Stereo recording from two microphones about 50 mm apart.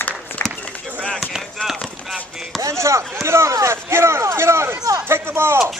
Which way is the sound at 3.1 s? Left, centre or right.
Right.